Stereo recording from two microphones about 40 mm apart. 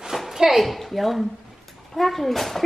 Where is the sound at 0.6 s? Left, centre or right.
Centre.